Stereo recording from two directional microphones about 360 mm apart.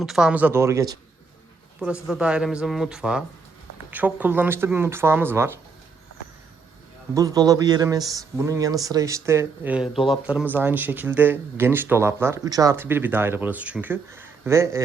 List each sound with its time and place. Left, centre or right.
0.0 s speech: centre
7.1 s speech: centre